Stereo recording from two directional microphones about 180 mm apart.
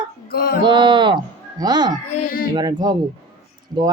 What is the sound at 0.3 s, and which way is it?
Music, 55° left (ahead or behind).